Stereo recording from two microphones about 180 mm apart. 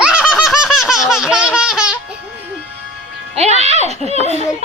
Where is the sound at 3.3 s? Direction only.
35° right (ahead or behind).